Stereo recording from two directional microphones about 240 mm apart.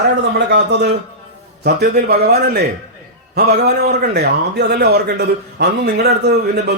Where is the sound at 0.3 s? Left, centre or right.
Right.